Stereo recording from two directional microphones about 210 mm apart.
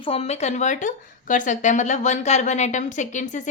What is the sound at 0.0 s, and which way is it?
Speech, 30° left (ahead or behind).